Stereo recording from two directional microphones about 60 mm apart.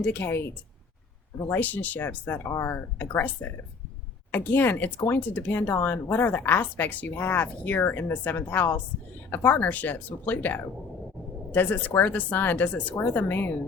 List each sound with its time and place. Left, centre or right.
0.0 s a woman's voice: left
1.5 s a woman's voice: left
4.9 s speech: left
5.3 s a woman's voice: left